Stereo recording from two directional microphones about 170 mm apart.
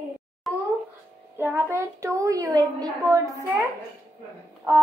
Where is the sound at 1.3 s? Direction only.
15° right (ahead or behind).